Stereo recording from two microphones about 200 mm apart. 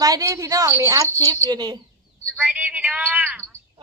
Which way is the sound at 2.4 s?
5° right (ahead or behind).